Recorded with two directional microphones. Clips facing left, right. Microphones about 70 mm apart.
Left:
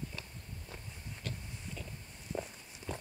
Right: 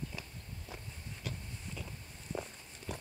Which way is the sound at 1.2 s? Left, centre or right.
Centre.